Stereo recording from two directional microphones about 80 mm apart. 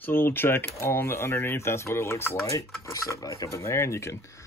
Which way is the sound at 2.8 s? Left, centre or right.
Left.